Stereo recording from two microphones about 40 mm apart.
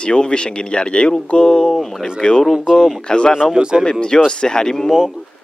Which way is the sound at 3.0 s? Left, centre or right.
Left.